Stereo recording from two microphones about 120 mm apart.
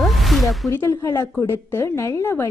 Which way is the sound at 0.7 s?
25° left (ahead or behind).